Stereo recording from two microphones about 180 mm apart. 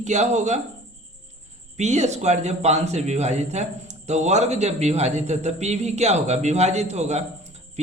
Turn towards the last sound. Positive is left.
turn(degrees=-35)  # may be behind; listen again after turning